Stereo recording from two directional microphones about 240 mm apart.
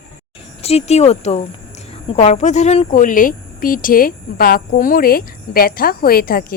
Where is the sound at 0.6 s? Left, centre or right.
Left.